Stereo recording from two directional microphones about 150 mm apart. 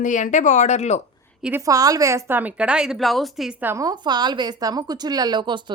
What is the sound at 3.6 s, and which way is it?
Speech, 15° right (ahead or behind).